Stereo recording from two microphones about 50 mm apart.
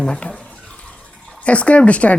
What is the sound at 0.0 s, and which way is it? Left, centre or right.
Speech, centre.